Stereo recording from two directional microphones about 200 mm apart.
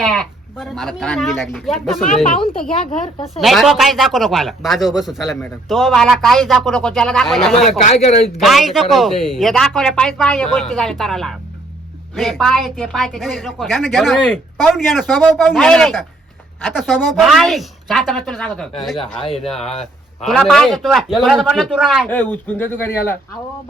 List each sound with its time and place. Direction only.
0.0 s speech: centre (ahead or behind)
3.3 s speech: centre (ahead or behind)
7.9 s a man's voice: 35° left (ahead or behind)
8.4 s speech: centre (ahead or behind)
19.2 s speech: 30° left (ahead or behind)
19.8 s speech: centre (ahead or behind)
22.1 s speech: 10° left (ahead or behind)